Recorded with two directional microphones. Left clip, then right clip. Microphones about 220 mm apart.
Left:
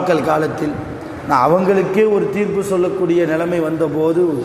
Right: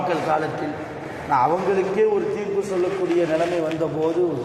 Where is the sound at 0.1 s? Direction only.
55° left (ahead or behind).